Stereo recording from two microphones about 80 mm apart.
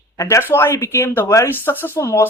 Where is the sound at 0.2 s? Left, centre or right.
Left.